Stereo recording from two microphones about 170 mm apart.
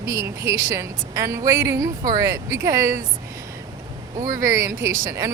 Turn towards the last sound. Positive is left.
turn(degrees=-20)  # may be behind; listen again after turning